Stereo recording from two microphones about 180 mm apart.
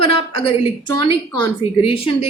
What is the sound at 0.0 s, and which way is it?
A woman's voice, 30° left (ahead or behind).